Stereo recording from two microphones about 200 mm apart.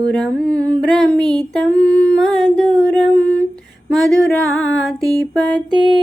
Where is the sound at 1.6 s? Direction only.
5° left (ahead or behind).